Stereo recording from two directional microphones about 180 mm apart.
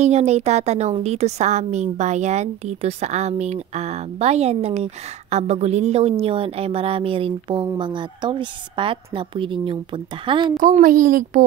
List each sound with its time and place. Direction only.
0.0 s a woman's voice: 40° right (ahead or behind)
10.6 s a woman's voice: 45° right (ahead or behind)